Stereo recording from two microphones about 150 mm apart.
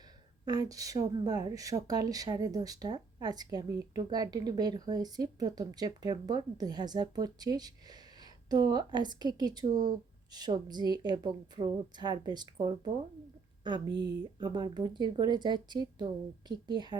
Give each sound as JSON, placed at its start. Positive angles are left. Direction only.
{"t": 0.4, "sound": "a woman's voice", "side_deg": -25}